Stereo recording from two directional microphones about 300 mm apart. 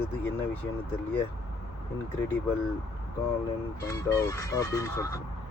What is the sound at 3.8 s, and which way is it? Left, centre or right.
Speech, centre.